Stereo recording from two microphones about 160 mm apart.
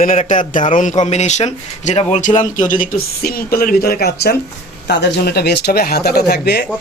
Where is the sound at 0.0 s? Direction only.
55° left (ahead or behind); by 4.4 s 75° left (ahead or behind).